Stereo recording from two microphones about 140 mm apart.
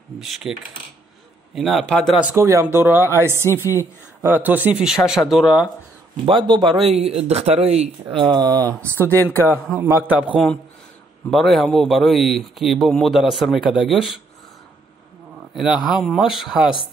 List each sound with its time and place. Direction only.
0.2 s speech: 5° right (ahead or behind)
2.3 s speech: 20° right (ahead or behind)
6.2 s speech: 35° right (ahead or behind)
9.1 s speech: 15° left (ahead or behind)
9.8 s speech: 15° right (ahead or behind)
11.2 s speech: centre (ahead or behind)
15.5 s speech: 5° right (ahead or behind)